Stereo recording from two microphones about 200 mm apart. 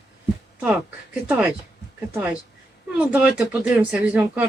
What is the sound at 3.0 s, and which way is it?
Speech, 5° right (ahead or behind).